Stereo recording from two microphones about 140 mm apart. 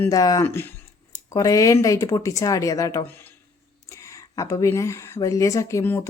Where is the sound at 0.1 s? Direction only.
25° left (ahead or behind).